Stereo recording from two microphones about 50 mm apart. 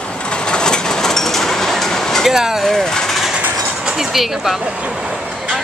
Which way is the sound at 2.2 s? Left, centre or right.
Centre.